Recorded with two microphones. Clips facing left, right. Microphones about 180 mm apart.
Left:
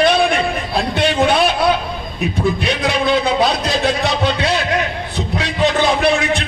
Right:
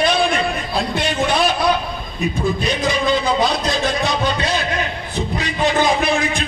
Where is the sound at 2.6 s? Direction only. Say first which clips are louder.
Left 1 dB; 65° left (ahead or behind).